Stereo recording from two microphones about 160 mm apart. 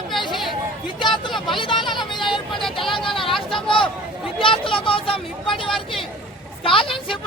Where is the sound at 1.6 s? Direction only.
30° left (ahead or behind).